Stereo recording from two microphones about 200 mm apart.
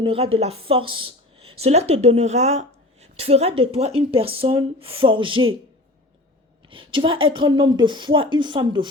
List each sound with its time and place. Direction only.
0.0 s a woman's voice: 30° right (ahead or behind)
6.7 s a woman's voice: 25° right (ahead or behind)